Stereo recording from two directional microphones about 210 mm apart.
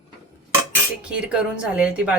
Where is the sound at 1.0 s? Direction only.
5° right (ahead or behind).